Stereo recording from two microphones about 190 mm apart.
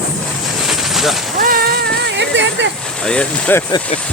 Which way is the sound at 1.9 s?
65° right (ahead or behind).